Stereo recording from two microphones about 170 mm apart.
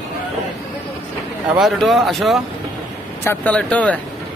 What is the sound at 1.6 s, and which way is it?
Speech, centre (ahead or behind).